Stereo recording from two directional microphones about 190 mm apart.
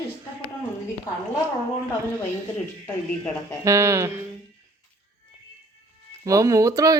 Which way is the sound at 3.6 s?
15° right (ahead or behind).